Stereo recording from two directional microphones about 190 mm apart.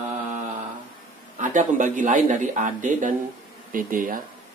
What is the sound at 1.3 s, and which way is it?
Speech, 40° right (ahead or behind).